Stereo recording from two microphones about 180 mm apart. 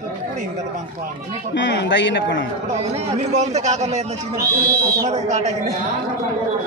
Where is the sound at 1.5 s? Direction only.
80° left.